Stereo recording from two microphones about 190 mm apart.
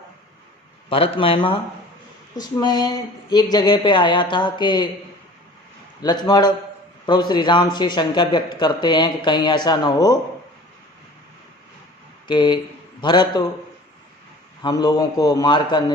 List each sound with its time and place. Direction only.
0.9 s a man's voice: 30° left (ahead or behind)
6.0 s a man's voice: 20° left (ahead or behind)
12.3 s a man's voice: 25° left (ahead or behind)
14.6 s a man's voice: 20° left (ahead or behind)